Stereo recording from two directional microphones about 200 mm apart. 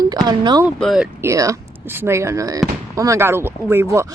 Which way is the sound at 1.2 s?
15° right (ahead or behind).